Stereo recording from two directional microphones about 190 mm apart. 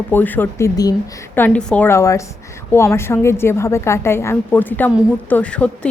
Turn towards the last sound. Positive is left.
turn(degrees=5)  # may be behind; listen again after turning